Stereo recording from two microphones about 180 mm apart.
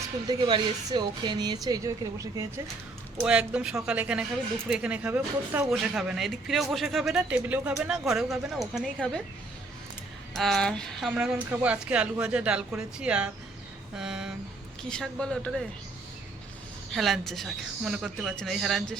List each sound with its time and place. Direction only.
0.3 s speech: 25° right (ahead or behind)
3.2 s speech: 5° right (ahead or behind)
10.3 s speech: centre (ahead or behind)
11.5 s speech: 10° right (ahead or behind)
13.9 s a sound: 5° right (ahead or behind)
14.8 s speech: 5° left (ahead or behind)
16.9 s speech: centre (ahead or behind)